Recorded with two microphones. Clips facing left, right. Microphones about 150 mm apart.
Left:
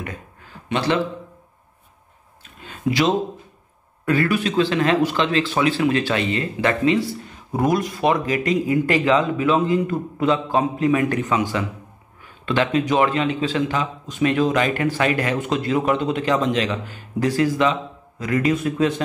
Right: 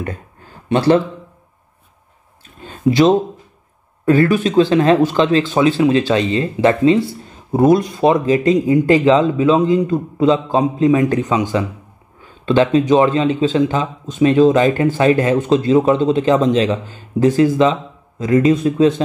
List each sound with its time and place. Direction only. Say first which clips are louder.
0.7 s speech: right 8 dB; 35° right (ahead or behind)
4.0 s speech: right 7 dB; 25° right (ahead or behind)
5.4 s a man's voice: right 5 dB; 20° right (ahead or behind)